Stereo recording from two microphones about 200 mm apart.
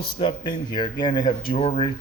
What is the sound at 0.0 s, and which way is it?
Speech, 25° left (ahead or behind).